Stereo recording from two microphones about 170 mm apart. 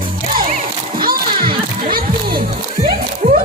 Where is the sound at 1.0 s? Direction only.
60° right (ahead or behind).